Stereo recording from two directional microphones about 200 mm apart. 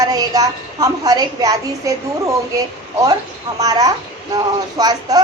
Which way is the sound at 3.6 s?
20° right (ahead or behind).